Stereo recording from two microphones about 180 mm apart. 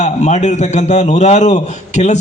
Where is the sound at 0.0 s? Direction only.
40° left (ahead or behind).